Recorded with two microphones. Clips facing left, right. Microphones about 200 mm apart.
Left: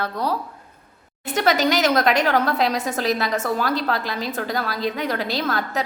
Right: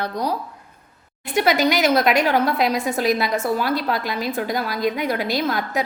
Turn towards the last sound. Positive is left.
turn(degrees=-10)  # may be behind; listen again after turning